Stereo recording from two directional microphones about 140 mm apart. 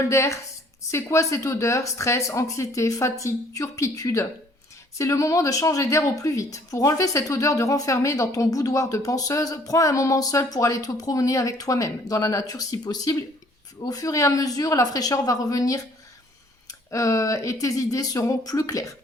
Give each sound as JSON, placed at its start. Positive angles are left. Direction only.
{"t": 0.0, "sound": "speech", "side_deg": 20}